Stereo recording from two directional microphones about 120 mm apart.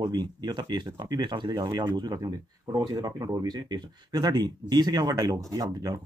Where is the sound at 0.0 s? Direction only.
35° right (ahead or behind).